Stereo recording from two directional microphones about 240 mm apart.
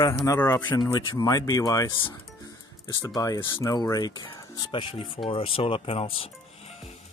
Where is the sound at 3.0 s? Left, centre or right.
Centre.